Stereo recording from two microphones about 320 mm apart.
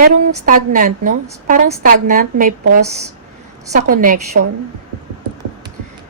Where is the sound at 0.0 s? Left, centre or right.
Right.